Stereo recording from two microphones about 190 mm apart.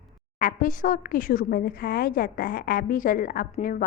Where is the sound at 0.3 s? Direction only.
45° left (ahead or behind).